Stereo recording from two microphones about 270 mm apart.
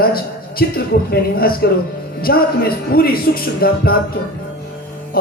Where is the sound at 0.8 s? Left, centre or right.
Left.